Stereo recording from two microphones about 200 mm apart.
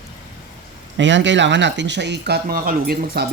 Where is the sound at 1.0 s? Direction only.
65° right (ahead or behind).